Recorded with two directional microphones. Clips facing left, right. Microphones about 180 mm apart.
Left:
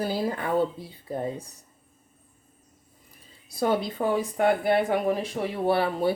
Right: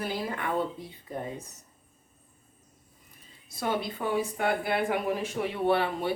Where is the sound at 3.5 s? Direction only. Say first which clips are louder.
Left 6 dB; 40° left (ahead or behind).